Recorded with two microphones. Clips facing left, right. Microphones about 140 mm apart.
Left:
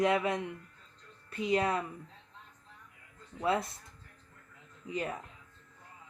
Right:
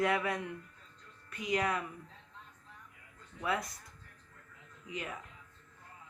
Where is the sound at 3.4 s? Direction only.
30° left (ahead or behind).